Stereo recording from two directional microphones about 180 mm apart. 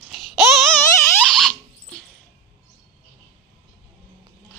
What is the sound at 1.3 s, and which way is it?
Rodents, centre (ahead or behind).